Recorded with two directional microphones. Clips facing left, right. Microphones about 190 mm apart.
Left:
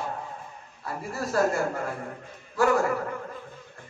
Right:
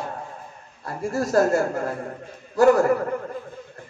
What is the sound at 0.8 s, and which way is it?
A man's voice, 45° right (ahead or behind).